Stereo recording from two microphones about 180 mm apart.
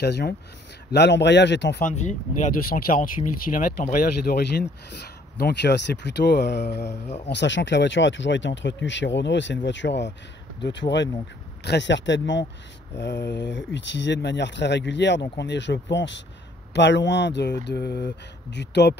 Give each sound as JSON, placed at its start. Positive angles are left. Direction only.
{"t": 0.0, "sound": "speech", "side_deg": 65}
{"t": 1.9, "sound": "speech", "side_deg": 45}
{"t": 7.2, "sound": "speech", "side_deg": 80}